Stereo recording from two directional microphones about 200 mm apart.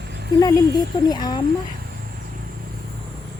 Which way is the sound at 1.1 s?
20° left (ahead or behind).